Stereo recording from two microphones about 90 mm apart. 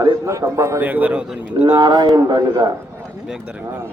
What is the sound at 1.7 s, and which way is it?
A man's voice, 60° right (ahead or behind).